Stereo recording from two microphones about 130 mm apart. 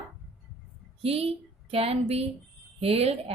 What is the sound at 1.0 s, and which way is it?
Speech, 50° right (ahead or behind).